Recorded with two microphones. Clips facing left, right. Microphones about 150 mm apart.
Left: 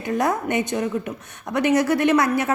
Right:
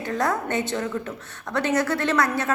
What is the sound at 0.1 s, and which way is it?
A woman's voice, 20° left (ahead or behind).